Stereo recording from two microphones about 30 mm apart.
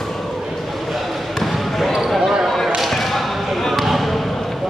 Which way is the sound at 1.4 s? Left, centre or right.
Centre.